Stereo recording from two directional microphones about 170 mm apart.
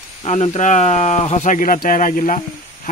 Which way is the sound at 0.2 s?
40° left (ahead or behind).